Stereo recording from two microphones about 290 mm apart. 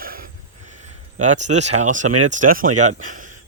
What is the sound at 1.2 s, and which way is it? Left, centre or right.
Speech, right.